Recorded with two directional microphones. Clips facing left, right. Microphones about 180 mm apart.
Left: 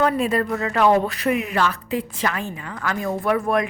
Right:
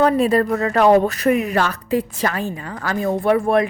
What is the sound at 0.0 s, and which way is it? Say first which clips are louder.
A woman's voice: right 5 dB; 35° right (ahead or behind).